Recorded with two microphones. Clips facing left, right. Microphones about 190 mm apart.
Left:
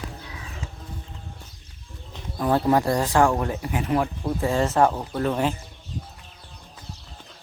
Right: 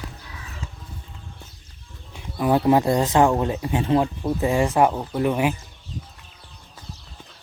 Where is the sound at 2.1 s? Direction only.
10° right (ahead or behind).